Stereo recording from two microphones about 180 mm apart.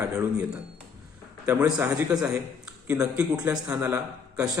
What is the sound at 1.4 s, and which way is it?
A man's voice, 10° right (ahead or behind).